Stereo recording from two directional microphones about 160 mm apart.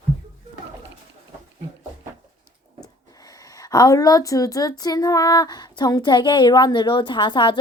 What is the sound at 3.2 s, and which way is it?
Speech, 20° left (ahead or behind).